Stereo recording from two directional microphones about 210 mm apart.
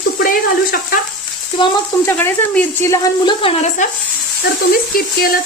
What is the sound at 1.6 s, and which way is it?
Speech, 20° left (ahead or behind).